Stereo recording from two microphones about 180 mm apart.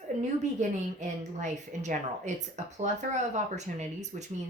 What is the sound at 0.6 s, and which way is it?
Speech, 40° right (ahead or behind).